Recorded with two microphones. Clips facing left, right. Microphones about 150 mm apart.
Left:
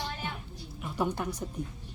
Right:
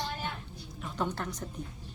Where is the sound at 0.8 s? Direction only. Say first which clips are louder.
Left 3 dB; 10° left (ahead or behind).